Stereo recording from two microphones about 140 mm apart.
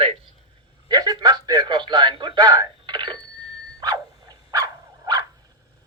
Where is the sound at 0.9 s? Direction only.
30° right (ahead or behind).